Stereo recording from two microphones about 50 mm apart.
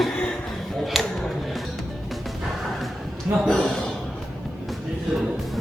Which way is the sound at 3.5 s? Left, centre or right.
Centre.